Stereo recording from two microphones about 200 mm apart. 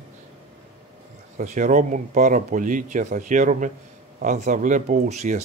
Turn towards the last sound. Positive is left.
turn(degrees=-35)  # may be behind; listen again after turning